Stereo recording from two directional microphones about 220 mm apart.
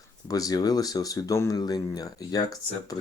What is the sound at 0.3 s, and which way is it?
Speech, 15° left (ahead or behind).